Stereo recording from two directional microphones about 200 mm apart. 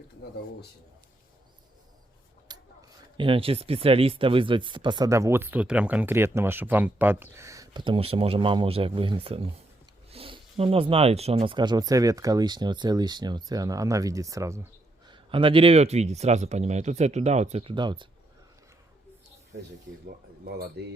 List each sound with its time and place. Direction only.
2.5 s a sound: 20° right (ahead or behind)
3.2 s speech: 25° right (ahead or behind)
20.4 s speech: 55° right (ahead or behind)